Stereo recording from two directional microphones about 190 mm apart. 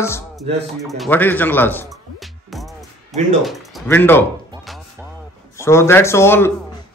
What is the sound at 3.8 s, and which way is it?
Speech, 10° left (ahead or behind).